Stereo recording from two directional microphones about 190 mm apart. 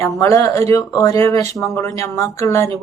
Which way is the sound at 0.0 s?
15° left (ahead or behind).